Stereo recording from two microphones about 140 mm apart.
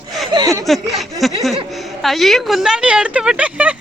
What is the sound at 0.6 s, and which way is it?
Speech, centre (ahead or behind).